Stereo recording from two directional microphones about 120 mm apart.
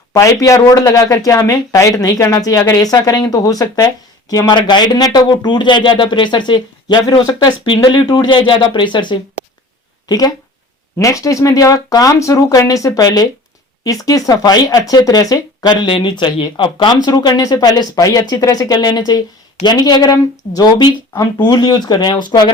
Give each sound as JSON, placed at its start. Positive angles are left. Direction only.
{"t": 0.1, "sound": "speech", "side_deg": 25}